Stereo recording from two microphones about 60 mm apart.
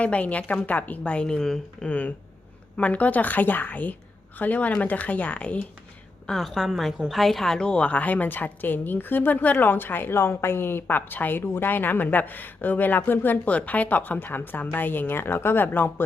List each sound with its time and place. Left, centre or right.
0.0 s a woman's voice: left
1.9 s a woman's voice: left
6.2 s a woman's voice: centre; by 16.0 s left